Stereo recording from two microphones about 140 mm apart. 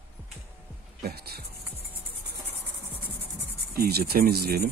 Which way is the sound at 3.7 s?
90° right.